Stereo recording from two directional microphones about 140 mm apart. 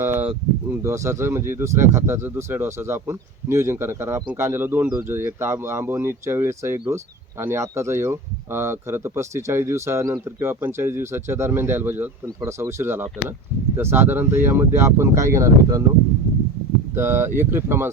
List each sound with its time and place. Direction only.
0.0 s a sound: 15° right (ahead or behind)
0.7 s speech: 20° right (ahead or behind)
16.9 s speech: 15° right (ahead or behind)